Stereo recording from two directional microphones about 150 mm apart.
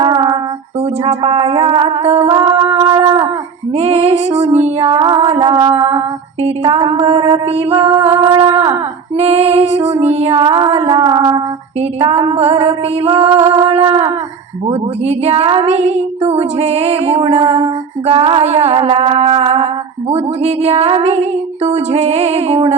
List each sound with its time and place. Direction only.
0.0 s female singing: 30° right (ahead or behind)
3.8 s female singing: 40° right (ahead or behind)
14.7 s music: 45° right (ahead or behind)
16.0 s female singing: 40° right (ahead or behind)
20.1 s music: 45° right (ahead or behind)